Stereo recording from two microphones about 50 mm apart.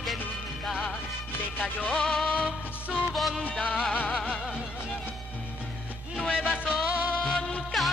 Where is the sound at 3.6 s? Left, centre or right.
Left.